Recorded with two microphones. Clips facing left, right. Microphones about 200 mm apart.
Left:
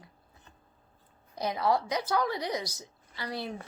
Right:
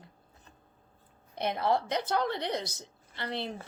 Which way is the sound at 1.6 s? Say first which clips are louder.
Left 1 dB; 25° right (ahead or behind).